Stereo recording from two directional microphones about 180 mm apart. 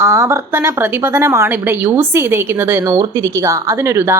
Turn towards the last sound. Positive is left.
turn(degrees=-15)  # may be behind; listen again after turning